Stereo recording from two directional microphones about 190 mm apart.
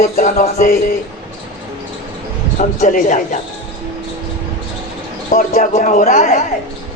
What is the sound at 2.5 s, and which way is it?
Speech, 40° left (ahead or behind).